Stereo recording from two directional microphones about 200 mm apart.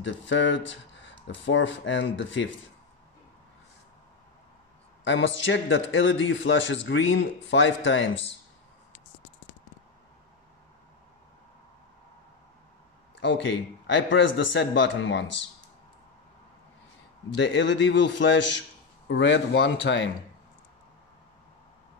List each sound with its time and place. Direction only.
0.0 s speech: 65° left (ahead or behind)
5.0 s a man's voice: 70° left (ahead or behind)
13.2 s speech: 65° left (ahead or behind)
17.3 s a man's voice: 65° left (ahead or behind)